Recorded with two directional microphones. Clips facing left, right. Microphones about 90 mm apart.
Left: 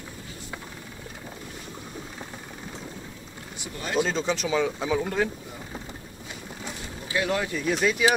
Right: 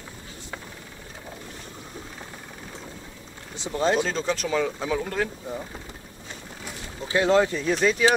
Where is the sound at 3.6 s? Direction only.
25° right (ahead or behind).